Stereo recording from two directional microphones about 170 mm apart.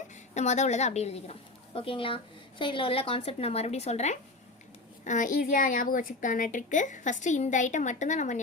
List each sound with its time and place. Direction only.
0.3 s a woman's voice: 40° left (ahead or behind)